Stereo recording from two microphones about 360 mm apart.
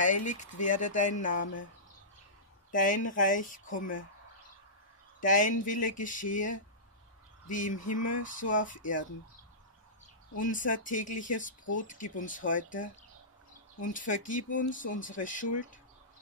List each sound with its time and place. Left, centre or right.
0.0 s speech: left
2.7 s speech: left
5.2 s speech: left
10.3 s speech: left